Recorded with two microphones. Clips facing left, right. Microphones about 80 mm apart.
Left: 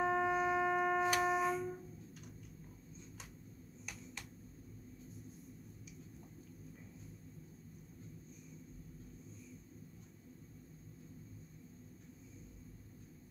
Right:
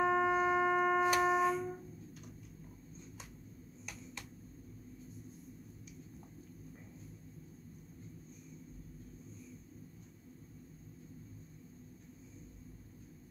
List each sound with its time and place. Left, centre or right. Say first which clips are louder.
0.0 s shofar: right 3 dB; right
0.7 s tick-tock: right 3 dB; centre
1.1 s a sound: right 4 dB; right